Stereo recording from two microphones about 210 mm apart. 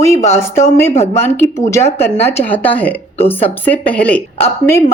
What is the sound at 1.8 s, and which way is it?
Speech, 30° left (ahead or behind).